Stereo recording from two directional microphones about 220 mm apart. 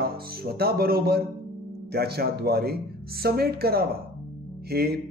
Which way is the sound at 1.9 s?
45° right (ahead or behind).